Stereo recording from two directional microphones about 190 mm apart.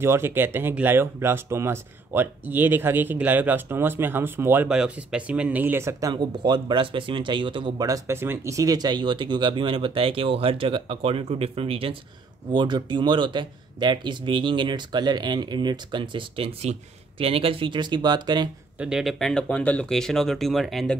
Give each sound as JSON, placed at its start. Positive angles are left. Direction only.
{"t": 0.0, "sound": "speech", "side_deg": -10}
{"t": 18.8, "sound": "speech", "side_deg": -5}